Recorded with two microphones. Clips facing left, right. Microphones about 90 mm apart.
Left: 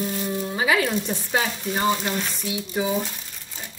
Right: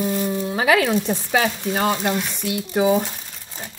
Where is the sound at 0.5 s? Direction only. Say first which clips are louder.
Right 4 dB; 75° right (ahead or behind).